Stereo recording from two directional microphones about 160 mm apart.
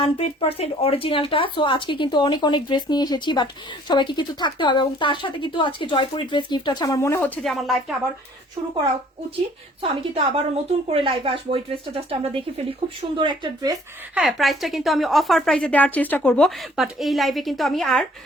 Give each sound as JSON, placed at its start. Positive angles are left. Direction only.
{"t": 0.0, "sound": "speech", "side_deg": 35}
{"t": 7.4, "sound": "a woman's voice", "side_deg": 0}
{"t": 9.9, "sound": "speech", "side_deg": -30}
{"t": 14.2, "sound": "a woman's voice", "side_deg": 0}